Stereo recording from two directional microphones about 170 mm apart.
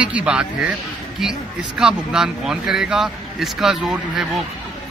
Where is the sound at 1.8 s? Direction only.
5° right (ahead or behind).